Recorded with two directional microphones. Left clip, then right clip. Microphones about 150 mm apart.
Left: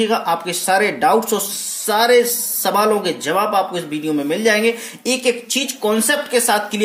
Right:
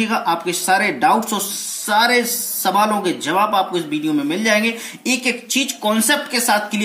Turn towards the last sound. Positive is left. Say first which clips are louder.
# left 1 dB
turn(degrees=20)  # may be behind; listen again after turning